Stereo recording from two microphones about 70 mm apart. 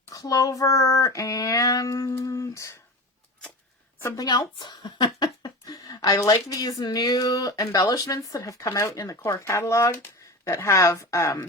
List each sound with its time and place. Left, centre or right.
0.1 s female singing: left
4.3 s speech: left
9.0 s female singing: left
9.3 s speech: left